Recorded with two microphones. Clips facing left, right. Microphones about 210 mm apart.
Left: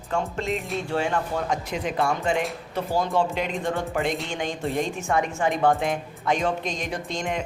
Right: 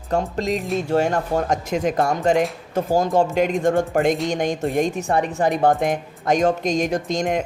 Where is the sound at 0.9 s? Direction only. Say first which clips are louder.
Right 6 dB; 45° right (ahead or behind).